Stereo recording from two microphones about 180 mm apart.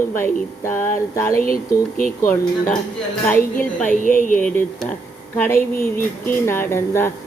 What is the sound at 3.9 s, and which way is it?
Speech, 50° left (ahead or behind).